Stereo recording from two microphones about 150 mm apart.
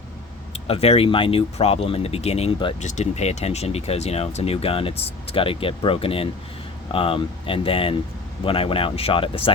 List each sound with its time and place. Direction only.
0.5 s speech: 45° left (ahead or behind)
2.8 s speech: 50° left (ahead or behind)